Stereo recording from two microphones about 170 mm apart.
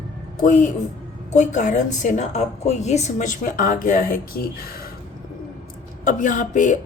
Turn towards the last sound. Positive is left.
turn(degrees=45)  # may be behind; listen again after turning